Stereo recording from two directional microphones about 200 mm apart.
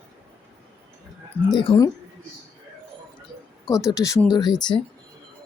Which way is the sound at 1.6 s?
20° left (ahead or behind).